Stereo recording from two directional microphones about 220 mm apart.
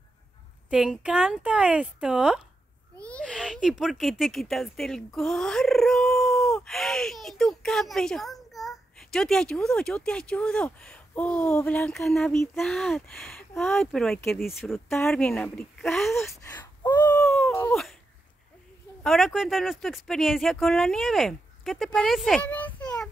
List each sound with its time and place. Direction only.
0.7 s speech: 5° right (ahead or behind)
16.4 s gasp: 20° left (ahead or behind)
16.9 s a sound: 10° left (ahead or behind)
19.0 s speech: centre (ahead or behind)
22.8 s child singing: 5° left (ahead or behind)